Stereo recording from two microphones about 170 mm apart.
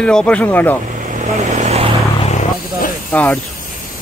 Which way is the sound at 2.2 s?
45° left (ahead or behind).